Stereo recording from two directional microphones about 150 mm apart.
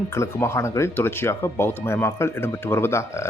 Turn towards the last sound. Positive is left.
turn(degrees=15)  # may be behind; listen again after turning